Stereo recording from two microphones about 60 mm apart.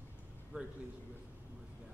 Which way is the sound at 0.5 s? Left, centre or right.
Centre.